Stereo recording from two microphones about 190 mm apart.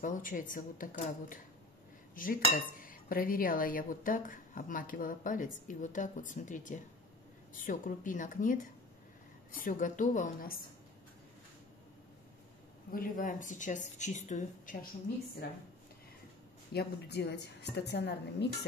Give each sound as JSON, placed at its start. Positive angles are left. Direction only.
{"t": 0.0, "sound": "speech", "side_deg": 45}
{"t": 12.9, "sound": "speech", "side_deg": 45}
{"t": 16.7, "sound": "a woman's voice", "side_deg": 60}